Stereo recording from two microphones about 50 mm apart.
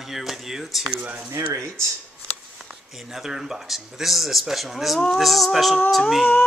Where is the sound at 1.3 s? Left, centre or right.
Right.